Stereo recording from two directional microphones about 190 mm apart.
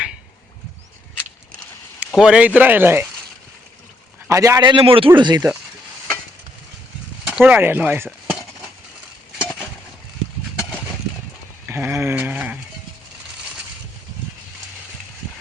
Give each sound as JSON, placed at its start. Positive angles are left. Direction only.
{"t": 2.0, "sound": "speech", "side_deg": -5}
{"t": 4.3, "sound": "speech", "side_deg": -15}
{"t": 7.3, "sound": "speech", "side_deg": -5}
{"t": 9.4, "sound": "chop", "side_deg": 5}
{"t": 11.7, "sound": "speech", "side_deg": -10}